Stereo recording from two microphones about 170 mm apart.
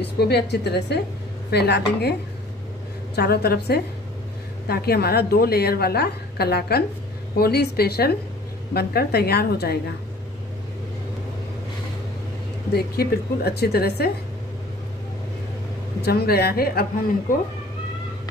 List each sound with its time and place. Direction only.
0.0 s a woman's voice: 75° left (ahead or behind)
3.2 s a woman's voice: 65° left (ahead or behind)
12.7 s a woman's voice: 65° left (ahead or behind)
16.0 s a woman's voice: 70° left (ahead or behind)